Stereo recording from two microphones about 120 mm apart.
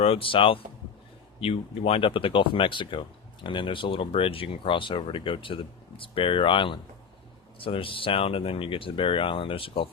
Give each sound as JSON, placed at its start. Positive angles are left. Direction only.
{"t": 0.0, "sound": "speech", "side_deg": 50}